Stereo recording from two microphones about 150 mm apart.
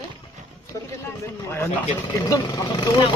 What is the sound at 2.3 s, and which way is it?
Speech, 30° left (ahead or behind).